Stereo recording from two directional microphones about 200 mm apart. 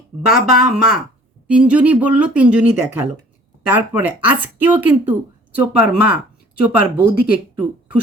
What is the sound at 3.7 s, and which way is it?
Speech, 10° right (ahead or behind).